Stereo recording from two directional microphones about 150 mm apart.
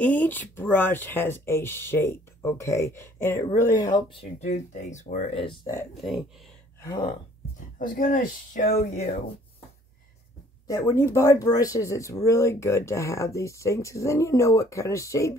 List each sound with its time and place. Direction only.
0.0 s speech: 10° left (ahead or behind); by 4.2 s 30° left (ahead or behind)
4.4 s speech: 50° left (ahead or behind)
7.8 s speech: 65° left (ahead or behind); by 9.2 s 45° left (ahead or behind)
10.7 s speech: 15° left (ahead or behind)